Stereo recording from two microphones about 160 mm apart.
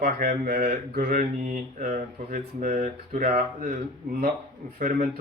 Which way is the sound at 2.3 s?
55° right (ahead or behind).